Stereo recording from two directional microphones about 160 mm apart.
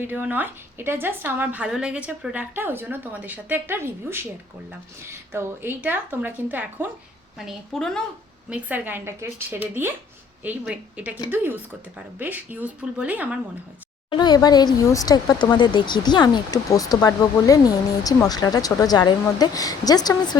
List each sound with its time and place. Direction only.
0.0 s a woman's voice: 10° right (ahead or behind)
7.3 s a woman's voice: centre (ahead or behind)
8.4 s a woman's voice: 10° right (ahead or behind)
14.1 s speech: 25° left (ahead or behind)